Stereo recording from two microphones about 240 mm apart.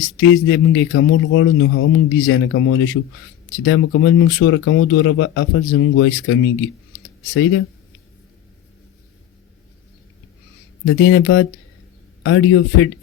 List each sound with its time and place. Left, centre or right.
0.2 s speech: left
10.8 s speech: left